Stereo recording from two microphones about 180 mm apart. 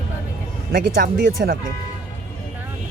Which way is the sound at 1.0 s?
55° right (ahead or behind).